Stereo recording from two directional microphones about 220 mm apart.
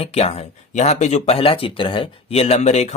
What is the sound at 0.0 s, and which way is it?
Speech, 25° left (ahead or behind).